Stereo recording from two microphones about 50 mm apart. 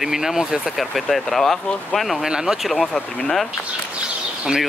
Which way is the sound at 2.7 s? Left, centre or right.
Centre.